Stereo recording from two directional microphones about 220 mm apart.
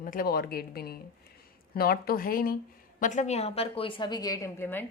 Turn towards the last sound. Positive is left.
turn(degrees=10)  # may be behind; listen again after turning